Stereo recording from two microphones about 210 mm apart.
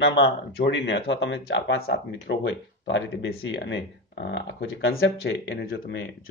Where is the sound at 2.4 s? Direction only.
60° left (ahead or behind).